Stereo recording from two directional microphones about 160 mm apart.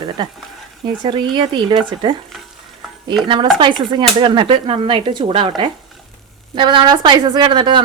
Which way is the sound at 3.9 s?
30° right (ahead or behind).